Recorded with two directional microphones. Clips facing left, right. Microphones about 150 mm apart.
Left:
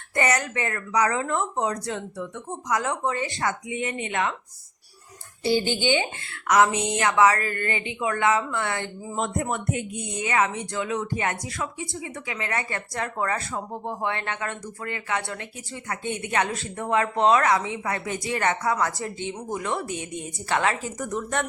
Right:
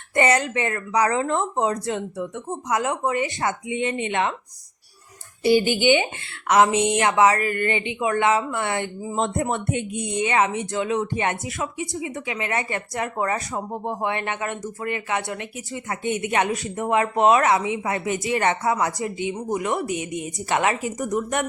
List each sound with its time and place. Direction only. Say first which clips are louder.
0.1 s speech: right 4 dB; 25° right (ahead or behind)
5.4 s speech: right 5 dB; 15° right (ahead or behind)